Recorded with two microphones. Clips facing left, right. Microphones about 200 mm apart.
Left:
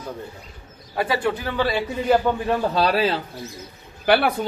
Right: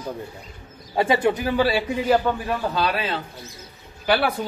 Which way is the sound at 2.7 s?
35° left (ahead or behind).